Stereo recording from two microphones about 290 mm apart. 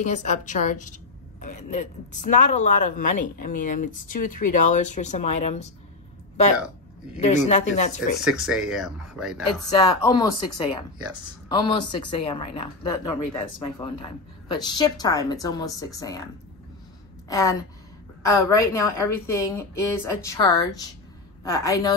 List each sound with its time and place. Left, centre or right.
0.0 s speech: left
7.2 s speech: left
8.2 s speech: centre
9.7 s a woman's voice: centre
17.3 s a woman's voice: centre